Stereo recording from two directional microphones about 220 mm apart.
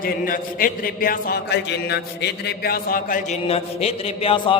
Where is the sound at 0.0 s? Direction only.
40° left (ahead or behind).